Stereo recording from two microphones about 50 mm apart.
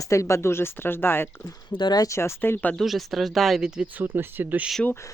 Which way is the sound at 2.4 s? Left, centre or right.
Left.